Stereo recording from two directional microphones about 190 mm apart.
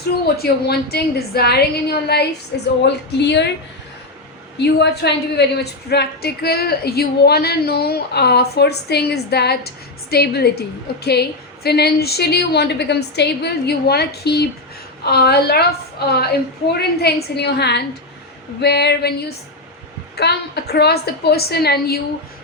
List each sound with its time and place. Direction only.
0.3 s a woman's voice: 55° left (ahead or behind)
4.6 s a woman's voice: 60° left (ahead or behind)
20.1 s a woman's voice: 60° left (ahead or behind)